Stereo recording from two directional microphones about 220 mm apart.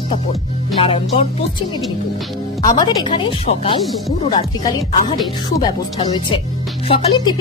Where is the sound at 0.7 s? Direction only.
25° left (ahead or behind).